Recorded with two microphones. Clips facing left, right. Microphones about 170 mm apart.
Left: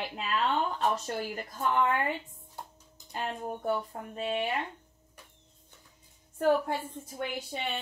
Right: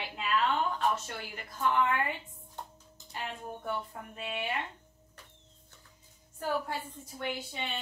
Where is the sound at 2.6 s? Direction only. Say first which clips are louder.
Even; 10° left (ahead or behind).